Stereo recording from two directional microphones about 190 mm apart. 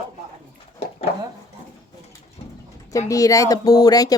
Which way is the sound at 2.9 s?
15° left (ahead or behind).